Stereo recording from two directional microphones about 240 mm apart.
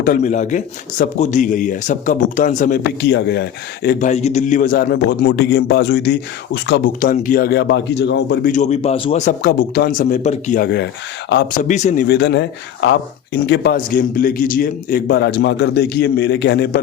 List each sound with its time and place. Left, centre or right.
0.0 s a man's voice: left
4.0 s a man's voice: left